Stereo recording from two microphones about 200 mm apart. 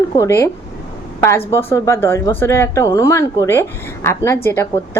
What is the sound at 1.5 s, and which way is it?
A woman's voice, 15° left (ahead or behind).